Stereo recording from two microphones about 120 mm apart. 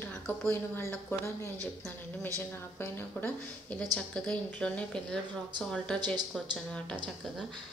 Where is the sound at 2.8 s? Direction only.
15° left (ahead or behind).